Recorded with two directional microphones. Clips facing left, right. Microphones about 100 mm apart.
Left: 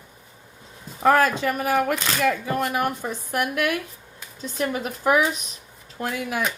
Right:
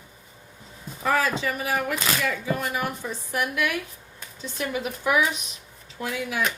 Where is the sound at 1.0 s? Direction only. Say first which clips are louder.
Left 5 dB; 55° left (ahead or behind).